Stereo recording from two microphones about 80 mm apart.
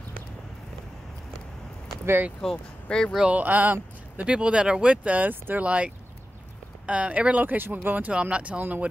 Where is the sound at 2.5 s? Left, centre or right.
Centre.